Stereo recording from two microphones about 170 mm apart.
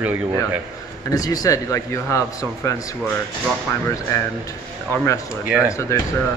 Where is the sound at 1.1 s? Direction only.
20° left (ahead or behind).